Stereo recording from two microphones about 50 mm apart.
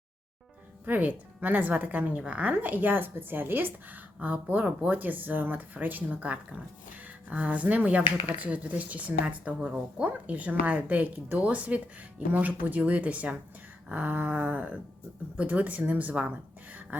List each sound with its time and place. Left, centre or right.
0.9 s speech: right; by 9.8 s centre
10.0 s speech: right
11.1 s speech: right
11.4 s a woman's voice: right